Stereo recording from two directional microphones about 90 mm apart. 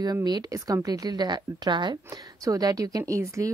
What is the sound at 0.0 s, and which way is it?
Speech, 50° right (ahead or behind).